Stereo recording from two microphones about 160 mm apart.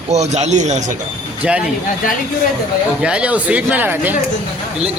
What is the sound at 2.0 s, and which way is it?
Speech, 60° left (ahead or behind).